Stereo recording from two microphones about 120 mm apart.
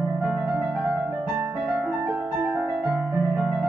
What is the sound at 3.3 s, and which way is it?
Music, 5° right (ahead or behind).